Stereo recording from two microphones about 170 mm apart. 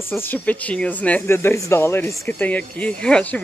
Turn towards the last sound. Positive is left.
turn(degrees=5)  # may be behind; listen again after turning